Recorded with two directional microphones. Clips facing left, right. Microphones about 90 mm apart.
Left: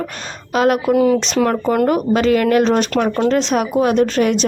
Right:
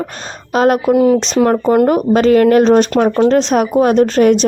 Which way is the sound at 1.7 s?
35° right (ahead or behind).